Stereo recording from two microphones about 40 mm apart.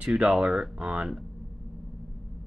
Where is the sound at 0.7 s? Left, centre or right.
Right.